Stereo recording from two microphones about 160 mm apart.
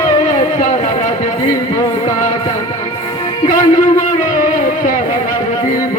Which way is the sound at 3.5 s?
50° left (ahead or behind).